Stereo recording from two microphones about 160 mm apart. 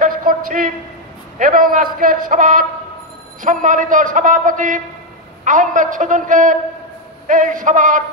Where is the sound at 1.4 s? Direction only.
60° right (ahead or behind).